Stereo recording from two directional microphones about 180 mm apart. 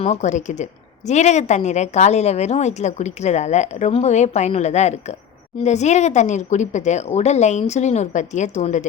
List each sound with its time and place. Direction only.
0.0 s a woman's voice: 40° left (ahead or behind)